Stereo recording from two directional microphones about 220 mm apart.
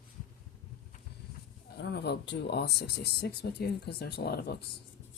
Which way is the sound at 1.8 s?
50° left (ahead or behind).